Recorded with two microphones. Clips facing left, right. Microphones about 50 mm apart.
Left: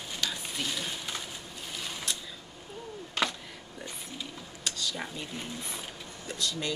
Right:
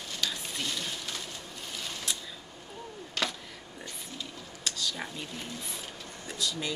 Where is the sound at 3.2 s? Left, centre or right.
Centre.